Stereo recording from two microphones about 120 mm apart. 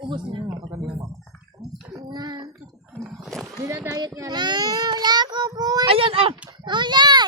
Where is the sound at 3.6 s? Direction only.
25° right (ahead or behind).